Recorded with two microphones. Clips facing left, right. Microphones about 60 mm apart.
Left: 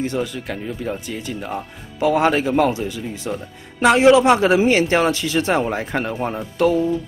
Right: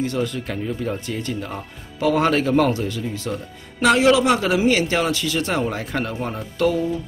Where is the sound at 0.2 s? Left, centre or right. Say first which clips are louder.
Right 1 dB; centre.